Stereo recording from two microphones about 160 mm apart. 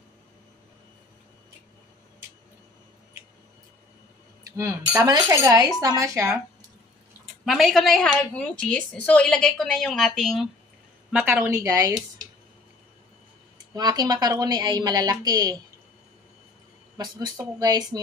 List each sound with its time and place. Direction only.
4.5 s speech: 20° right (ahead or behind)
7.4 s a woman's voice: centre (ahead or behind); by 11.9 s 20° right (ahead or behind)
13.7 s speech: 25° right (ahead or behind)
16.9 s speech: 25° right (ahead or behind)